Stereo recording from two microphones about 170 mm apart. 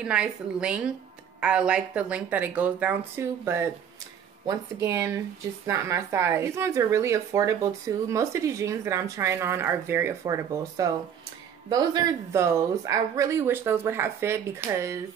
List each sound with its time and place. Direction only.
0.0 s a woman's voice: 5° right (ahead or behind)